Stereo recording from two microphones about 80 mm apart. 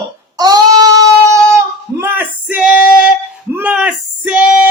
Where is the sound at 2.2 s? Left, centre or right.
Centre.